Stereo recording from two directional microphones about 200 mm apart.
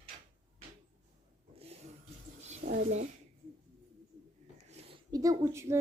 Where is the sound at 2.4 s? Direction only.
40° right (ahead or behind).